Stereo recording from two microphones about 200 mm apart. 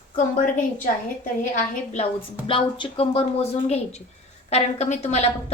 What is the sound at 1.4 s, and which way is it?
Speech, 35° left (ahead or behind).